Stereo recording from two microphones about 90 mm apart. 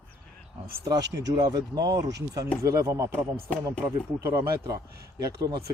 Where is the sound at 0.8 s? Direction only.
45° right (ahead or behind).